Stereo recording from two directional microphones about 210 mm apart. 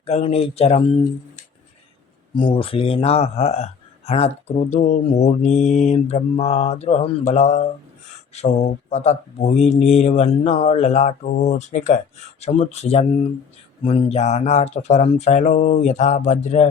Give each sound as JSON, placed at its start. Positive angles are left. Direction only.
{"t": 0.0, "sound": "speech", "side_deg": 30}
{"t": 2.3, "sound": "speech", "side_deg": 25}